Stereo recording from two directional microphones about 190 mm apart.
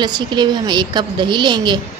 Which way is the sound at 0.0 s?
25° right (ahead or behind).